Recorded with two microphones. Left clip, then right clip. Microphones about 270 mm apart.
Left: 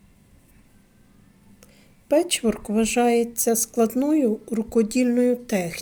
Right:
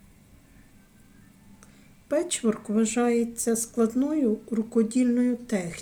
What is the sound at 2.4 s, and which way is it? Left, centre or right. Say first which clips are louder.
Speech: left 3 dB; left.